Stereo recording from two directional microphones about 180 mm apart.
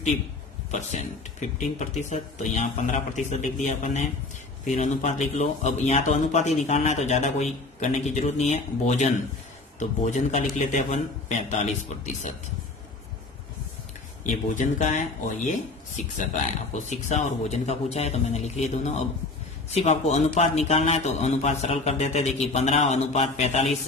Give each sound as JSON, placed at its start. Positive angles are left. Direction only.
{"t": 0.7, "sound": "speech", "side_deg": 40}
{"t": 14.5, "sound": "speech", "side_deg": 45}